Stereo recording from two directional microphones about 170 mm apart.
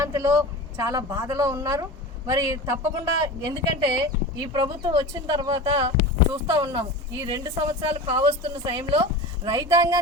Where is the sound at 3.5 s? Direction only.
25° right (ahead or behind).